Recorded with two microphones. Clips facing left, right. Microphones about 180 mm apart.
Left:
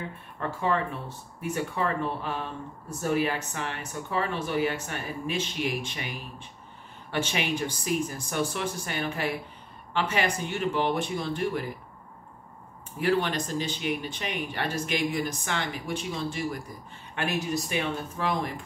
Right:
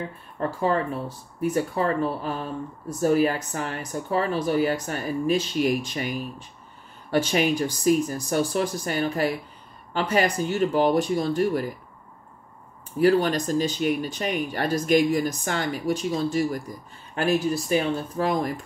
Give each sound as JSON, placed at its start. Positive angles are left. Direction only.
{"t": 0.4, "sound": "speech", "side_deg": -35}
{"t": 13.0, "sound": "speech", "side_deg": -40}